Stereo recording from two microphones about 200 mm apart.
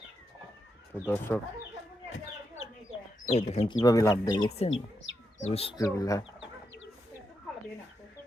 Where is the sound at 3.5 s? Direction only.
30° left (ahead or behind).